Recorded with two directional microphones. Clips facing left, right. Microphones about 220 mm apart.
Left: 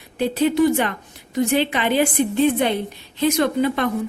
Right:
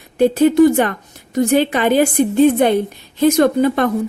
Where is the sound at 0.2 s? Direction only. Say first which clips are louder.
Right 7 dB; 45° right (ahead or behind).